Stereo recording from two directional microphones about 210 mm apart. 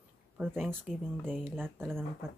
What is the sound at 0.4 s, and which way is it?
Speech, 5° right (ahead or behind).